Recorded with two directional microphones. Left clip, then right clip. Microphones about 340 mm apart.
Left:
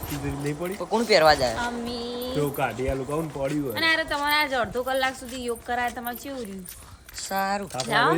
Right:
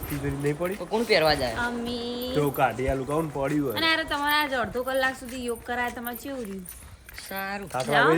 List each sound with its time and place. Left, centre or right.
0.3 s speech: centre
0.9 s speech: centre
1.5 s speech: centre